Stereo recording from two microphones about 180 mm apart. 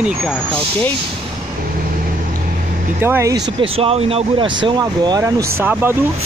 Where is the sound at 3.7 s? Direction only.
35° right (ahead or behind).